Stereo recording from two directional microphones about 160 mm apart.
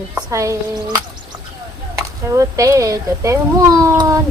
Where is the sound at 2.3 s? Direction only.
20° right (ahead or behind).